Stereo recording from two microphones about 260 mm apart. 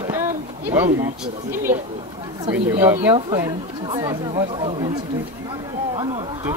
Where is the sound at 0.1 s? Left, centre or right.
Centre.